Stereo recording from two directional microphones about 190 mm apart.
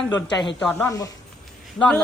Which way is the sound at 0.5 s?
5° left (ahead or behind).